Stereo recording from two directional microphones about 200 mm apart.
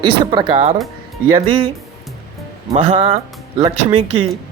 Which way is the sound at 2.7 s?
30° right (ahead or behind).